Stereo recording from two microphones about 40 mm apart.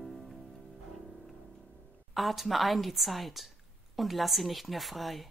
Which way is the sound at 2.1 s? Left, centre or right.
Centre.